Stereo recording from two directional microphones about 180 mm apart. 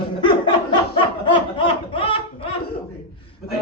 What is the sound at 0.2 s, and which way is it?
Laughter, 25° left (ahead or behind).